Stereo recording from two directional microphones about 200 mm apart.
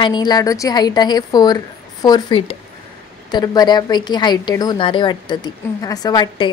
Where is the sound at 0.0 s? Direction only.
20° left (ahead or behind).